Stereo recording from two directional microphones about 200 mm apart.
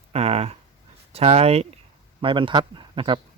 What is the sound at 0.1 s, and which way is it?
Speech, 30° right (ahead or behind).